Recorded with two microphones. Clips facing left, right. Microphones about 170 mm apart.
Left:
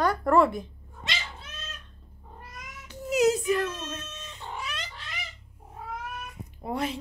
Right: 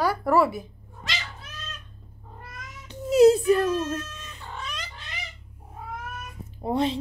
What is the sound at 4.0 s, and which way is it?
Cat, 25° left (ahead or behind).